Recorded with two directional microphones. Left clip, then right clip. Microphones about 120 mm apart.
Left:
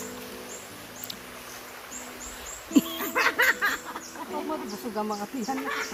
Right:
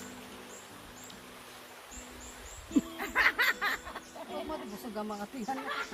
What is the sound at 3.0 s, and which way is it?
Music, 45° right (ahead or behind).